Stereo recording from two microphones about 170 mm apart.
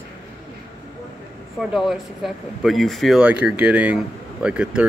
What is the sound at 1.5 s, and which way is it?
Speech, centre (ahead or behind).